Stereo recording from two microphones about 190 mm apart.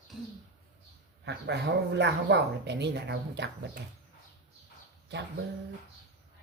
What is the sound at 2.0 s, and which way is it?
Speech, 65° right (ahead or behind).